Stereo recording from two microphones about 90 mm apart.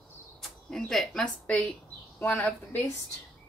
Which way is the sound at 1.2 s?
10° left (ahead or behind).